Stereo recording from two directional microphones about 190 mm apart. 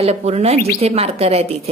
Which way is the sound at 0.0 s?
35° right (ahead or behind).